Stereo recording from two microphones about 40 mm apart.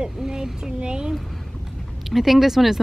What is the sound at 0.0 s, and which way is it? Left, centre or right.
Speech, centre.